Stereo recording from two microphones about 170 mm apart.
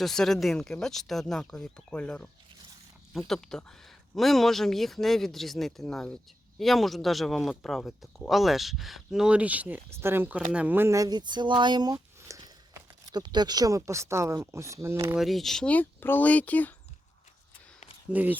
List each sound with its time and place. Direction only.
0.0 s speech: centre (ahead or behind); by 11.9 s 25° right (ahead or behind)
12.3 s a sound: 20° right (ahead or behind)
13.1 s speech: 25° right (ahead or behind)
15.1 s speech: centre (ahead or behind)
18.1 s speech: 10° right (ahead or behind)